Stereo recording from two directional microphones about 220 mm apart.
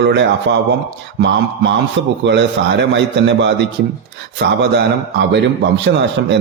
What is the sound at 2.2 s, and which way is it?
A man's voice, 55° right (ahead or behind).